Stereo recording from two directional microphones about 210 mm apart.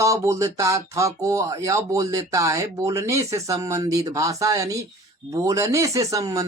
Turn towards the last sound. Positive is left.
turn(degrees=-15)  # may be behind; listen again after turning